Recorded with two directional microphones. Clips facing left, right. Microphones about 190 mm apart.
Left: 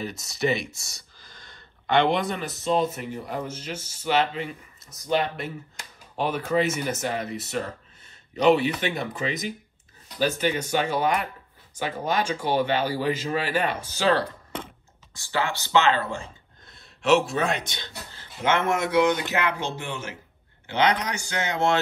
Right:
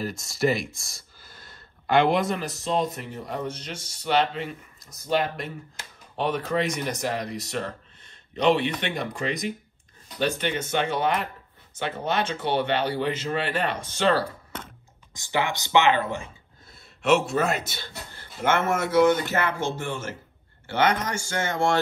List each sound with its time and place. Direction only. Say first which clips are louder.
0.0 s speech: right 2 dB; centre (ahead or behind)
15.1 s speech: right 1 dB; 15° right (ahead or behind)
16.6 s speech: even; centre (ahead or behind)
18.8 s speech: right 2 dB; 15° left (ahead or behind)
19.2 s speech: even; 50° right (ahead or behind)
19.9 s speech: right 2 dB; 15° left (ahead or behind)